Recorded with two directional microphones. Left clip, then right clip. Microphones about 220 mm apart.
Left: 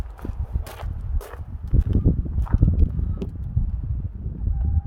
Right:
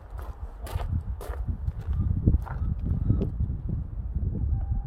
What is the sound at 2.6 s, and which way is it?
Clip-clop, 45° left (ahead or behind).